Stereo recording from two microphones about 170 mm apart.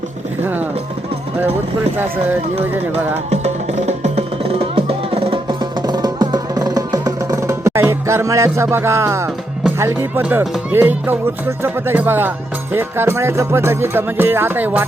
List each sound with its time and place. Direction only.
3.8 s music: 40° right (ahead or behind); by 14.8 s 10° right (ahead or behind)